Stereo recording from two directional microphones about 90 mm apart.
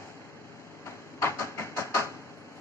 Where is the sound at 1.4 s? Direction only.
30° left (ahead or behind).